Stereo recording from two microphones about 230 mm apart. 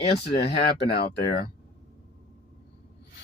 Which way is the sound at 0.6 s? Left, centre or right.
Left.